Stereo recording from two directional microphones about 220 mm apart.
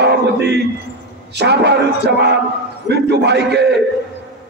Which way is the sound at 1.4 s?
50° right (ahead or behind).